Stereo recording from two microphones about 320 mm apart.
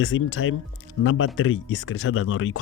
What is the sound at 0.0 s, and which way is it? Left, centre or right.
Speech, left.